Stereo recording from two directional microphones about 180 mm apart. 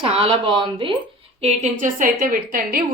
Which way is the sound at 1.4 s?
45° right (ahead or behind).